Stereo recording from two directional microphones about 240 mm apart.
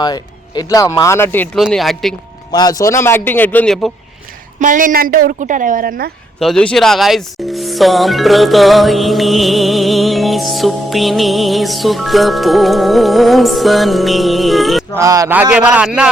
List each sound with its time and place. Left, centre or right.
0.0 s speech: centre
2.5 s speech: centre
4.6 s speech: right
6.4 s speech: centre
14.9 s speech: centre